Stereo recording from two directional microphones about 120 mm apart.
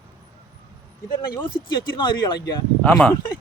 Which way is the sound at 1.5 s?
40° left (ahead or behind).